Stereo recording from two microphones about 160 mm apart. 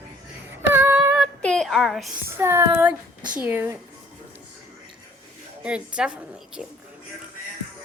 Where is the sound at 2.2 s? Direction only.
15° right (ahead or behind).